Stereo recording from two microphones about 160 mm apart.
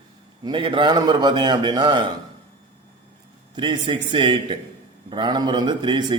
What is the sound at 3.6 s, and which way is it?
A man's voice, 30° right (ahead or behind).